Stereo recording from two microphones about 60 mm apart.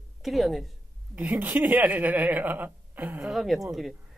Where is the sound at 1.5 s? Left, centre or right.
Right.